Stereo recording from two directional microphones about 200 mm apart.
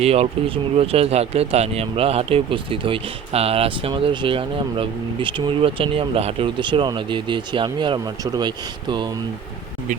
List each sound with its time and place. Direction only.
0.0 s speech: 30° right (ahead or behind)